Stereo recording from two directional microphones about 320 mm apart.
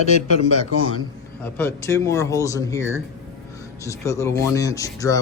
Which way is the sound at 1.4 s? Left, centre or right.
Centre.